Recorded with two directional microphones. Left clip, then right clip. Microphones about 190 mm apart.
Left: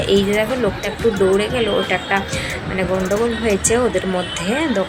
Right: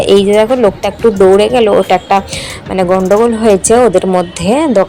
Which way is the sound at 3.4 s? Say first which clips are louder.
Right 10 dB; 30° right (ahead or behind).